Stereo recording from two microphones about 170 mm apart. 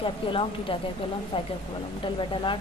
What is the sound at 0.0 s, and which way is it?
Speech, 30° left (ahead or behind).